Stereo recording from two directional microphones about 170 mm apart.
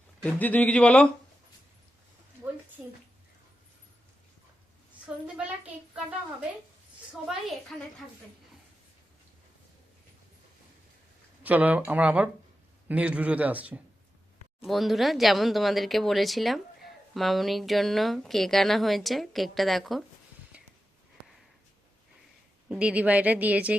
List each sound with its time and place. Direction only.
0.2 s speech: 10° left (ahead or behind)
2.8 s a sound: 10° right (ahead or behind)
7.2 s speech: centre (ahead or behind)
11.4 s a woman's voice: 10° right (ahead or behind)
22.7 s a woman's voice: 5° right (ahead or behind)